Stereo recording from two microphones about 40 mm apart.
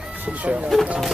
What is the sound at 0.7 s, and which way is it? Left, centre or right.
Speech, centre.